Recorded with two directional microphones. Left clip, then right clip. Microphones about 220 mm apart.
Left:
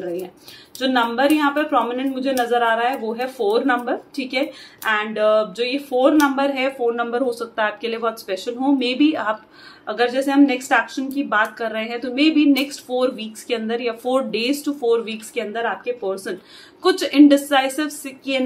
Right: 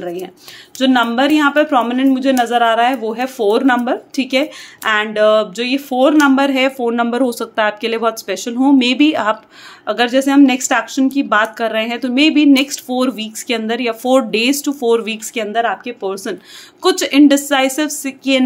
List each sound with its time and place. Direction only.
0.7 s speech: 50° right (ahead or behind)